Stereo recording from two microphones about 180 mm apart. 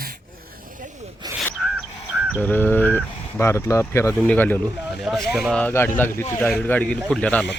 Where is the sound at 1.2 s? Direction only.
25° right (ahead or behind).